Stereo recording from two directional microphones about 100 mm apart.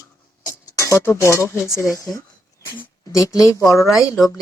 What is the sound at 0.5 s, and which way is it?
Speech, 25° left (ahead or behind).